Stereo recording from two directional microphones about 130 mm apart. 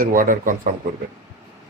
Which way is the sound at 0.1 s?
90° right.